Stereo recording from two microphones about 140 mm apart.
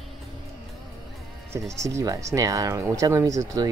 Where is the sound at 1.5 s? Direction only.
20° right (ahead or behind).